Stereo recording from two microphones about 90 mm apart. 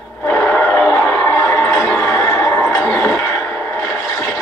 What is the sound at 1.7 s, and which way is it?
Music, 5° left (ahead or behind).